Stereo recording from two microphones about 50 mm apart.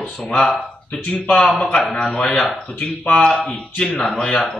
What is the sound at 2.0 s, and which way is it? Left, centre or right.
Speech, centre.